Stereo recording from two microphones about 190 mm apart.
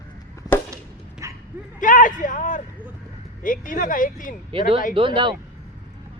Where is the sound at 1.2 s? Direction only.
15° right (ahead or behind).